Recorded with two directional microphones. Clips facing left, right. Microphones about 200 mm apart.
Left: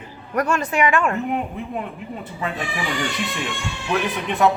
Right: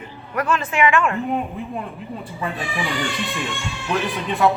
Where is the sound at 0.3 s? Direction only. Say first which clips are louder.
Left 1 dB; 40° left (ahead or behind).